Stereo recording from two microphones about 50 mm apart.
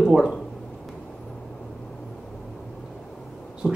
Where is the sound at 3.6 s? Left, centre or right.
Centre.